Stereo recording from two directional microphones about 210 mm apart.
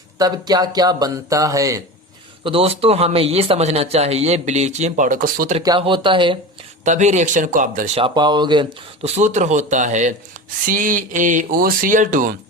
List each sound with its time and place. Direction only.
0.2 s speech: 20° right (ahead or behind)
2.4 s speech: 25° right (ahead or behind)
5.5 s speech: 25° right (ahead or behind)
6.8 s speech: 35° right (ahead or behind)
8.0 s speech: 20° right (ahead or behind); by 12.3 s 40° right (ahead or behind)